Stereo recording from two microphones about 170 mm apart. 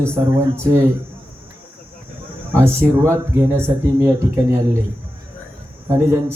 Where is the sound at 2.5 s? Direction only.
15° right (ahead or behind).